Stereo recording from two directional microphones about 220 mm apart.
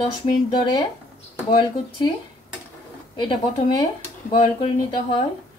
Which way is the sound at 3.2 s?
20° left (ahead or behind).